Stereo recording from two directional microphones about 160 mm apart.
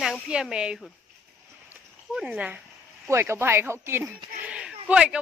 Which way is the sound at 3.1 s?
15° right (ahead or behind).